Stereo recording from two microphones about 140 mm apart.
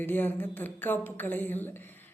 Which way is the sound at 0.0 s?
15° left (ahead or behind).